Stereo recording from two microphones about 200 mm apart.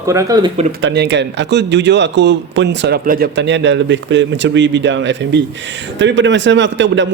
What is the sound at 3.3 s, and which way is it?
A man's voice, 65° right (ahead or behind).